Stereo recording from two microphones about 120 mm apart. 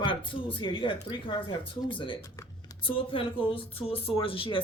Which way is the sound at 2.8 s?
45° left (ahead or behind).